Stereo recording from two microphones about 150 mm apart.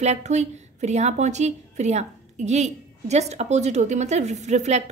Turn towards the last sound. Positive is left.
turn(degrees=-50)  # may be behind; listen again after turning